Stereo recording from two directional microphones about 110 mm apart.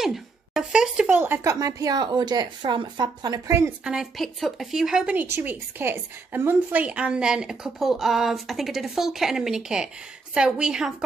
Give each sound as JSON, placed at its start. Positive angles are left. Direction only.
{"t": 0.0, "sound": "a sound", "side_deg": -5}
{"t": 1.4, "sound": "speech", "side_deg": -30}
{"t": 3.8, "sound": "a woman's voice", "side_deg": -5}